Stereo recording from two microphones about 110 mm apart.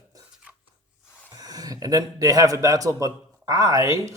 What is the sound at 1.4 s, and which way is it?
A man's voice, 35° right (ahead or behind).